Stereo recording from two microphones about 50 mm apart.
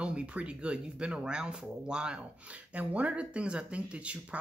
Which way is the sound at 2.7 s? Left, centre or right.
Right.